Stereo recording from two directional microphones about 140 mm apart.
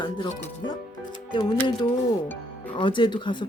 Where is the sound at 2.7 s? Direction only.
35° left (ahead or behind).